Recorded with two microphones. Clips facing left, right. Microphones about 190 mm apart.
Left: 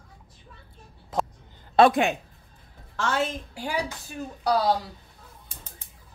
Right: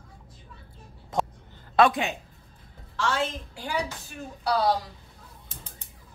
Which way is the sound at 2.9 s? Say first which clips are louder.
Left 1 dB; 45° left (ahead or behind).